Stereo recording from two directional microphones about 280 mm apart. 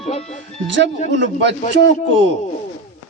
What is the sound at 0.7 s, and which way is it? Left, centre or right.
A man's voice, right.